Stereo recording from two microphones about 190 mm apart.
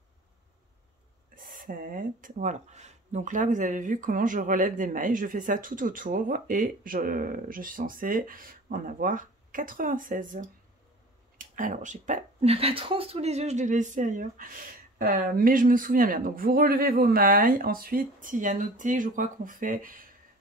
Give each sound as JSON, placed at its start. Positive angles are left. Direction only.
{"t": 1.3, "sound": "speech", "side_deg": -45}